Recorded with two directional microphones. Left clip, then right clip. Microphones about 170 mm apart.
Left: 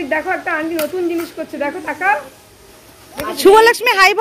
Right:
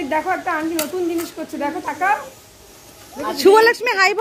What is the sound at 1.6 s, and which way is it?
Speech, 90° right.